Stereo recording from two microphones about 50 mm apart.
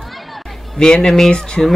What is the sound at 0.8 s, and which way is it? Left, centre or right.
Speech, centre.